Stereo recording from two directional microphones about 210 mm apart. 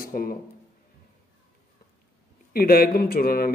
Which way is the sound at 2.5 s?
45° left (ahead or behind).